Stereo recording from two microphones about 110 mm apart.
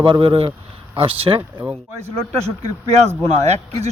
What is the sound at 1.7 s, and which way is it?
Speech, 25° right (ahead or behind).